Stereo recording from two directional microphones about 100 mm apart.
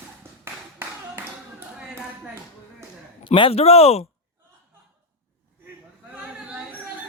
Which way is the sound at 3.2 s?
60° left (ahead or behind).